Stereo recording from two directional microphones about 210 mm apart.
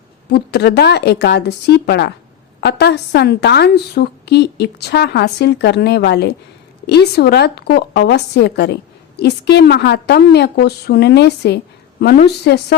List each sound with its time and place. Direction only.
0.3 s a woman's voice: 50° left (ahead or behind)